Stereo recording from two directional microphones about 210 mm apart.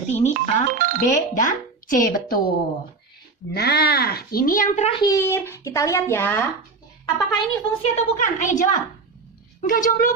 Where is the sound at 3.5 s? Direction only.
50° left (ahead or behind).